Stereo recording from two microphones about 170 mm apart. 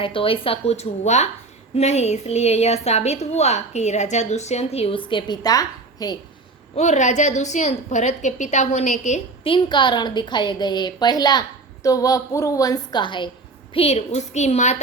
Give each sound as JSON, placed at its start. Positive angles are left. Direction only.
{"t": 0.0, "sound": "a woman's voice", "side_deg": 30}
{"t": 6.7, "sound": "a woman's voice", "side_deg": 45}